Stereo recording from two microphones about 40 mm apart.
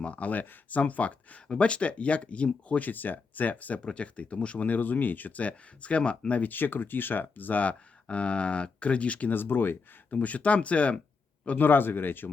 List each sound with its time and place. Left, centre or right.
0.0 s speech: left
1.5 s speech: left
3.8 s speech: left
4.7 s speech: left
6.4 s speech: left
8.0 s speech: left
9.3 s speech: left
10.1 s speech: left
11.6 s speech: left